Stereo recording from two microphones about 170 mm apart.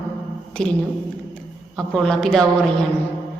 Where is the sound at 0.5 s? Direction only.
5° left (ahead or behind).